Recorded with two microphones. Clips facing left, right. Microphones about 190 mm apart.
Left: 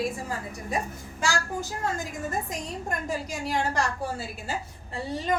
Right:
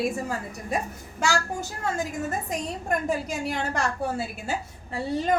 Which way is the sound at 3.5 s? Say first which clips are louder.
Left 3 dB; 55° right (ahead or behind).